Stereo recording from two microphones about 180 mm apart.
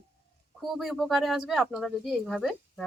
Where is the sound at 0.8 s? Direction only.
Centre (ahead or behind).